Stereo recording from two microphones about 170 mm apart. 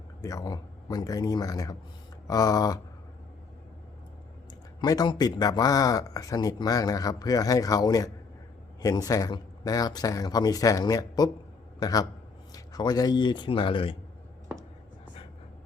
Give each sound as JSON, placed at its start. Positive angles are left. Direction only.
{"t": 0.2, "sound": "speech", "side_deg": 20}
{"t": 4.8, "sound": "speech", "side_deg": 25}